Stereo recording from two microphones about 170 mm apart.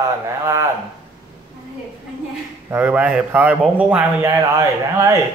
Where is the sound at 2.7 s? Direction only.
10° right (ahead or behind).